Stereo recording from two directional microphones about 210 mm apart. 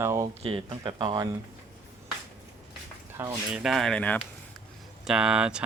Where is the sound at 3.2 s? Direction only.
10° right (ahead or behind).